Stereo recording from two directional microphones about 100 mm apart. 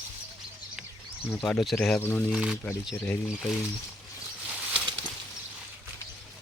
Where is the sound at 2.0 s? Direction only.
25° left (ahead or behind).